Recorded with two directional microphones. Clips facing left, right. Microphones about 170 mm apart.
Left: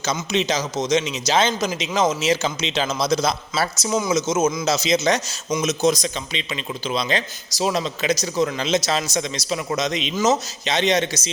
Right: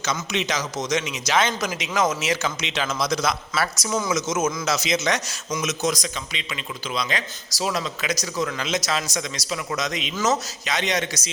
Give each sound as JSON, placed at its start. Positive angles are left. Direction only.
{"t": 0.0, "sound": "a man's voice", "side_deg": 30}
{"t": 3.8, "sound": "a man's voice", "side_deg": 15}